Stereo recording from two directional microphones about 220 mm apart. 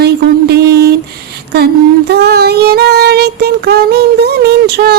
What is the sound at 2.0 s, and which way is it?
Child singing, 45° right (ahead or behind).